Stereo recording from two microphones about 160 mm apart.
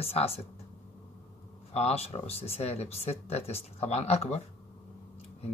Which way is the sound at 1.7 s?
40° left (ahead or behind).